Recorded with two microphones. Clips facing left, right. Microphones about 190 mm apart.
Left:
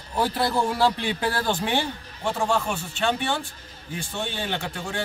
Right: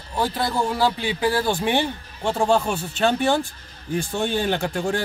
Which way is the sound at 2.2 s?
30° right (ahead or behind).